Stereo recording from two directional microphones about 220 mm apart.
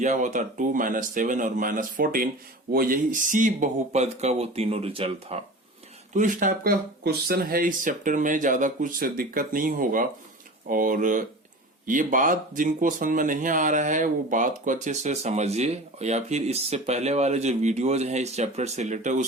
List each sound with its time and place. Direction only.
0.0 s speech: 35° right (ahead or behind)